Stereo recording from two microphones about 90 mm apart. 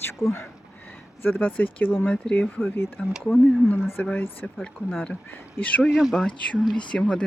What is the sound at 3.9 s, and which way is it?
Speech, 20° left (ahead or behind).